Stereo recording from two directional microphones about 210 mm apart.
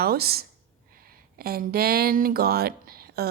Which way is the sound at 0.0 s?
50° right (ahead or behind).